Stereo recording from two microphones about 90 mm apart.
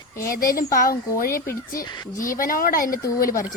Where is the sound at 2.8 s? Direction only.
35° left (ahead or behind).